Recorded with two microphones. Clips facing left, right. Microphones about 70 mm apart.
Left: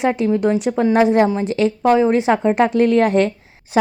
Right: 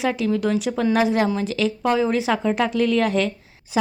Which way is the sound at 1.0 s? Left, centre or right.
Left.